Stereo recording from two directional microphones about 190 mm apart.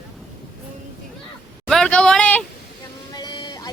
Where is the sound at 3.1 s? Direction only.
20° left (ahead or behind).